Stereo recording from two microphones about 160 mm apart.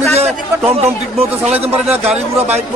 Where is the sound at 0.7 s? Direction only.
40° right (ahead or behind).